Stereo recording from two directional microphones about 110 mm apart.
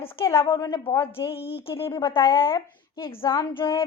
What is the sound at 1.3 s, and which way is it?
Speech, 60° left (ahead or behind).